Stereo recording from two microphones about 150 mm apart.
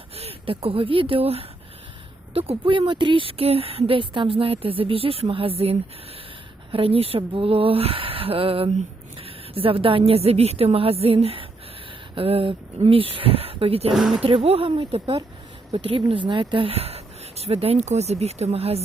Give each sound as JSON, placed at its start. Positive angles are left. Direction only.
{"t": 0.2, "sound": "speech", "side_deg": -40}
{"t": 13.9, "sound": "speech", "side_deg": 0}
{"t": 14.2, "sound": "speech", "side_deg": -40}